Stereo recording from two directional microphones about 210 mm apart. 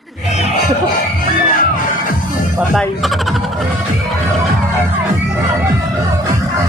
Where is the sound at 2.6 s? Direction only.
Centre (ahead or behind).